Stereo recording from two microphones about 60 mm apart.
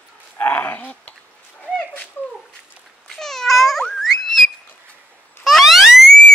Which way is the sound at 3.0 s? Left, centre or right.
Centre.